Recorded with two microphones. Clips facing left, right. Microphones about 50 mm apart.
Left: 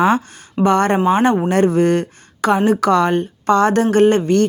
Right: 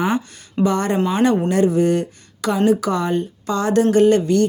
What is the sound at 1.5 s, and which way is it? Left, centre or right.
A woman's voice, left.